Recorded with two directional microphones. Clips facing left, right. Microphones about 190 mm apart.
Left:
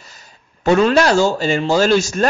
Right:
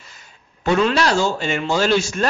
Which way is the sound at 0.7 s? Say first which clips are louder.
Left 4 dB; 45° left (ahead or behind).